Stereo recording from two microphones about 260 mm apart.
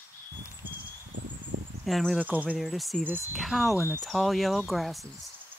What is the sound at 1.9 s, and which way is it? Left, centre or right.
Speech, centre.